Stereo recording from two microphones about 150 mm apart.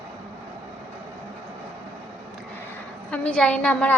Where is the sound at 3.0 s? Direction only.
10° left (ahead or behind).